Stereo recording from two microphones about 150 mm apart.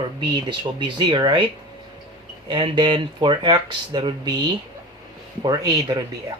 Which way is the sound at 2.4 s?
35° right (ahead or behind).